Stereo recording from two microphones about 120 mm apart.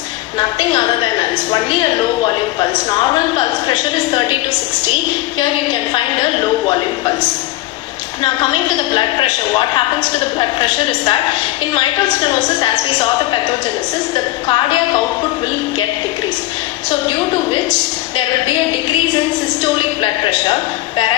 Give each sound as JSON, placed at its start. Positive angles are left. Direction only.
{"t": 0.3, "sound": "speech", "side_deg": 35}
{"t": 3.3, "sound": "a woman's voice", "side_deg": 40}
{"t": 6.7, "sound": "speech", "side_deg": 35}
{"t": 9.0, "sound": "speech", "side_deg": 40}
{"t": 12.5, "sound": "speech", "side_deg": 35}
{"t": 14.4, "sound": "speech", "side_deg": 40}